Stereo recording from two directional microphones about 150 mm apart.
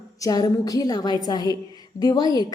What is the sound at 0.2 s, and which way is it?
A woman's voice, 25° left (ahead or behind).